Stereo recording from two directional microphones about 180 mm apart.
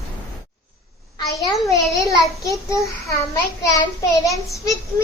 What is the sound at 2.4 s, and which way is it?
Child singing, 15° left (ahead or behind).